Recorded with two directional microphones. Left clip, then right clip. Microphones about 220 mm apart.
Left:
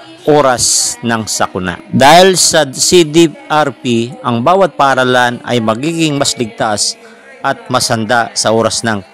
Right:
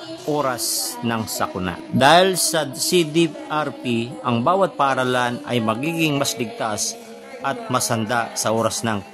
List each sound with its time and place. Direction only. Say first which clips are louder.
0.3 s speech: left 13 dB; 60° right (ahead or behind)